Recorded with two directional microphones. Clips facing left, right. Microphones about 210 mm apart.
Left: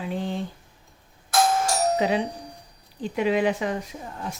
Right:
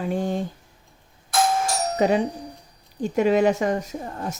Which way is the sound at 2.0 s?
45° right (ahead or behind).